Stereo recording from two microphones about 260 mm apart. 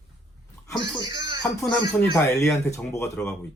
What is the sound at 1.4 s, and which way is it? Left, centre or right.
Speech, centre.